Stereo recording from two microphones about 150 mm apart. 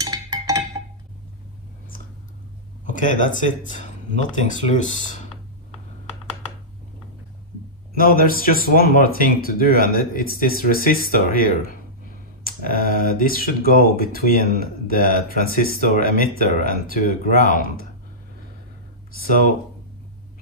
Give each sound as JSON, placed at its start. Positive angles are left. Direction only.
{"t": 0.0, "sound": "a sound", "side_deg": -25}
{"t": 2.8, "sound": "speech", "side_deg": 60}
{"t": 7.9, "sound": "speech", "side_deg": 75}